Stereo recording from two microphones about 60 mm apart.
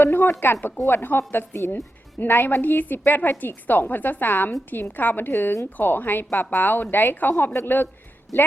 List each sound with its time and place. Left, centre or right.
0.0 s a woman's voice: left